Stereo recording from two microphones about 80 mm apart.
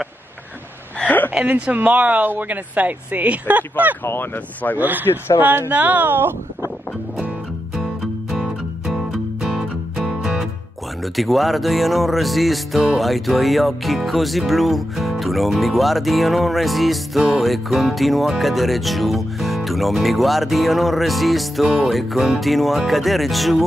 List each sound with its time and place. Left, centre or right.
0.9 s a sound: left
1.3 s speech: right
4.0 s speech: left
4.7 s speech: right
7.2 s music: centre
11.1 s speech: centre